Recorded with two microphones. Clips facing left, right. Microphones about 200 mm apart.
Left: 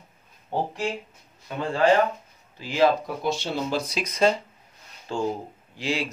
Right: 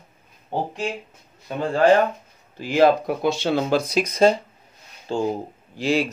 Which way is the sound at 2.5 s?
55° right (ahead or behind).